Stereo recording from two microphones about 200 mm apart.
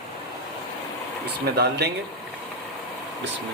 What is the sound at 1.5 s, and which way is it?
Speech, 55° right (ahead or behind).